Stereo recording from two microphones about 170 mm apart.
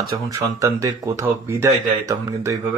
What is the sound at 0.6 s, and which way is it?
Speech, 15° right (ahead or behind).